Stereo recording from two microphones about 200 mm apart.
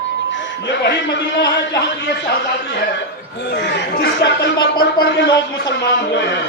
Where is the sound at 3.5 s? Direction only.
60° left (ahead or behind).